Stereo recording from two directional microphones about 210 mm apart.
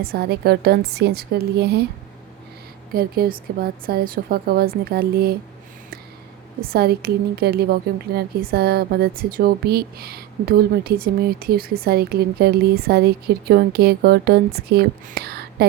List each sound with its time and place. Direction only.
0.0 s a woman's voice: 45° right (ahead or behind)
2.9 s a woman's voice: 45° right (ahead or behind)
6.7 s a woman's voice: 50° right (ahead or behind)